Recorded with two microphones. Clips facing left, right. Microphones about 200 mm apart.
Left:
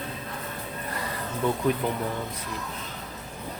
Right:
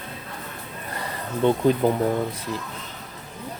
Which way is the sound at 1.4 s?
30° right (ahead or behind).